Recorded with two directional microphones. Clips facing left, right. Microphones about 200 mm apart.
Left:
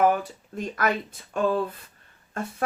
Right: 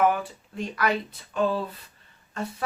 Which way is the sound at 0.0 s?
40° left (ahead or behind).